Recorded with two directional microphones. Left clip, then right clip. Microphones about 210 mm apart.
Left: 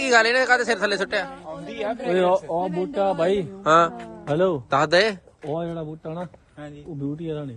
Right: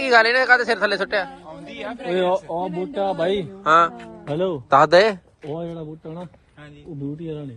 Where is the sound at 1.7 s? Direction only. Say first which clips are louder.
Left 4 dB; 45° left (ahead or behind).